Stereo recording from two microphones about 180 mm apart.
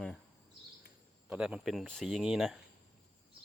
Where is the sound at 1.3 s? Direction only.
5° right (ahead or behind).